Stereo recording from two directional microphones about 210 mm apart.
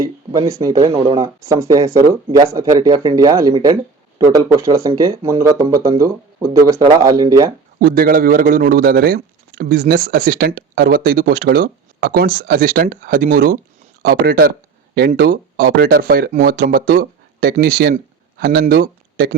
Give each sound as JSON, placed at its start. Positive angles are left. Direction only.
{"t": 0.0, "sound": "speech", "side_deg": -15}
{"t": 7.8, "sound": "speech", "side_deg": -45}